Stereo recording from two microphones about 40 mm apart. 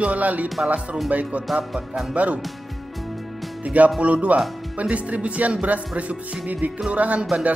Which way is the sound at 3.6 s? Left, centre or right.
Right.